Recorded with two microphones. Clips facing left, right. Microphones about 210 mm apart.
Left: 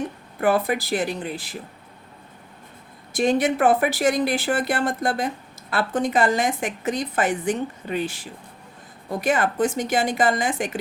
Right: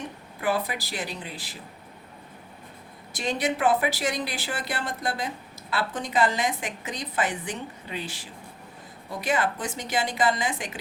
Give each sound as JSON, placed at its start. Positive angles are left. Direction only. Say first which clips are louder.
{"t": 0.3, "sound": "a woman's voice", "louder": "left 7 dB", "side_deg": 55}
{"t": 3.1, "sound": "a woman's voice", "louder": "left 8 dB", "side_deg": 50}